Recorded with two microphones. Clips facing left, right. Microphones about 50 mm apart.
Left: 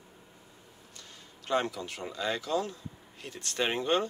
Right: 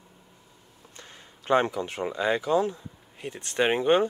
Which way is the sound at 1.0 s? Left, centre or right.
Right.